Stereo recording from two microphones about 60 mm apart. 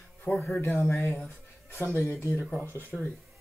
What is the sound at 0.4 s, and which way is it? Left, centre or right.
Speech, left.